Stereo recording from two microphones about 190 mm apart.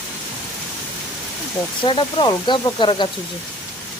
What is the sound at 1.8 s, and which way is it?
Speech, 25° left (ahead or behind).